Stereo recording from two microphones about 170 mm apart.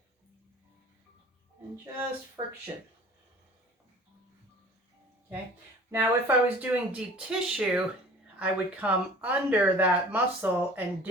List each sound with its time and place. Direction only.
2.4 s speech: 20° right (ahead or behind)
5.9 s speech: 10° right (ahead or behind)